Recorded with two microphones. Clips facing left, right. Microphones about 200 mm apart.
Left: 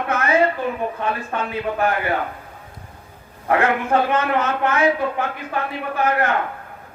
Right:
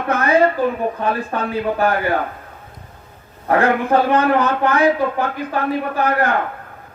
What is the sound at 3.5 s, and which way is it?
A man's voice, 35° right (ahead or behind).